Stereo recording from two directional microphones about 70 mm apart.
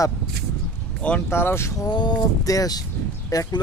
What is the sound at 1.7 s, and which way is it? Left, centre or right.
Speech, left.